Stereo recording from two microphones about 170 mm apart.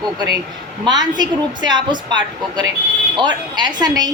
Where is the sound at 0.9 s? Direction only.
25° right (ahead or behind).